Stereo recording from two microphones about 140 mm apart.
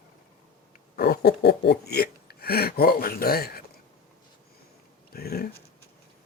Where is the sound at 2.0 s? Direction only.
90° left.